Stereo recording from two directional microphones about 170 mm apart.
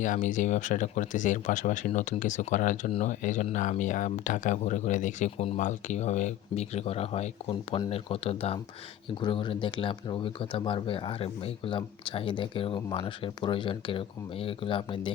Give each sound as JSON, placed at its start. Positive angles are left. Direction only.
{"t": 0.0, "sound": "speech", "side_deg": 50}